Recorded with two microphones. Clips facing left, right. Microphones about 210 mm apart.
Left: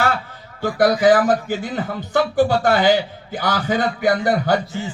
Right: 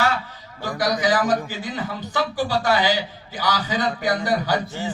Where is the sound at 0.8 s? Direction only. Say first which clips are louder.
Left 7 dB; 55° left (ahead or behind).